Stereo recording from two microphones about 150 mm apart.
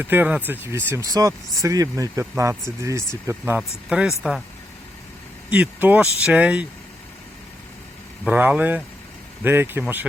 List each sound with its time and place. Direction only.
0.0 s speech: 10° right (ahead or behind)
3.6 s speech: centre (ahead or behind)
5.5 s speech: 10° right (ahead or behind)
8.2 s speech: 10° right (ahead or behind)